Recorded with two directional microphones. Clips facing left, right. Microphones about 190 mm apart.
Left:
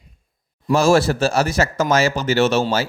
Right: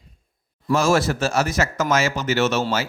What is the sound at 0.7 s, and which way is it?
Speech, 30° left (ahead or behind).